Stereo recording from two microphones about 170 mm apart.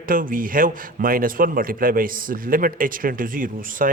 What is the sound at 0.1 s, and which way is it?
A man's voice, 55° right (ahead or behind).